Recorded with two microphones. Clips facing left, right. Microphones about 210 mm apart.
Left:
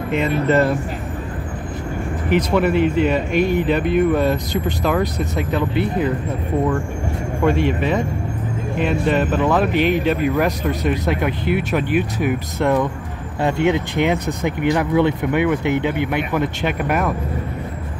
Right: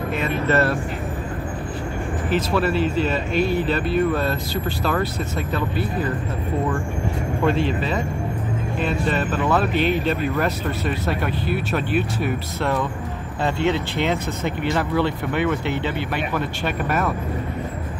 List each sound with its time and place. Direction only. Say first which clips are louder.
0.1 s speech: left 5 dB; 15° left (ahead or behind)
2.2 s speech: left 4 dB; 15° left (ahead or behind)
7.4 s speech: left 4 dB; 15° left (ahead or behind)
9.1 s speech: left 4 dB; 15° left (ahead or behind)